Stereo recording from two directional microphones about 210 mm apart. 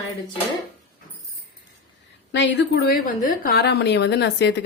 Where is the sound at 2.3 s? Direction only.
55° left (ahead or behind).